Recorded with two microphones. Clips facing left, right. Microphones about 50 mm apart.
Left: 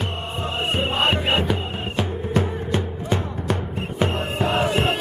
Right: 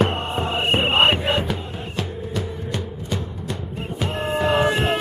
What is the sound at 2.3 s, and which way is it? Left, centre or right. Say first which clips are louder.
Music: left 7 dB; left.